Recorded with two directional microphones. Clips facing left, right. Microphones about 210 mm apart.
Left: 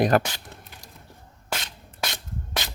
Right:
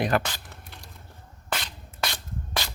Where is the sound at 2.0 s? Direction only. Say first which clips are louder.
Even; 20° left (ahead or behind).